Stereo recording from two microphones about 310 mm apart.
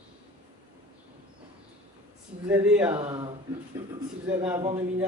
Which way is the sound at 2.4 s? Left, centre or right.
Centre.